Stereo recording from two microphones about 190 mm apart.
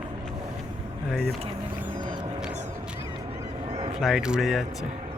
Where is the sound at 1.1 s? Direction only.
Centre (ahead or behind).